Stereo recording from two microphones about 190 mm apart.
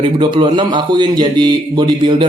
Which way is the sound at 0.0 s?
25° right (ahead or behind).